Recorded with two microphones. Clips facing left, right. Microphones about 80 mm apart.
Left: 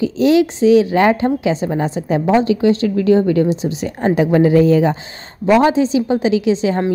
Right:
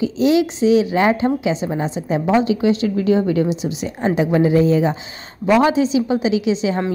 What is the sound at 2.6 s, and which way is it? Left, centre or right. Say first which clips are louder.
A woman's voice: left 3 dB; left.